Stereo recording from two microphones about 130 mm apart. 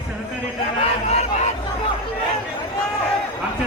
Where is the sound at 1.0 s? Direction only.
60° left (ahead or behind).